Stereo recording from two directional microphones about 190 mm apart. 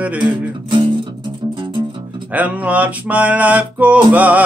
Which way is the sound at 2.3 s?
5° right (ahead or behind).